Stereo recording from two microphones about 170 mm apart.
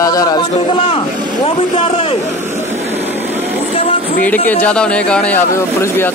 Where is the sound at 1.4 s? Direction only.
35° left (ahead or behind).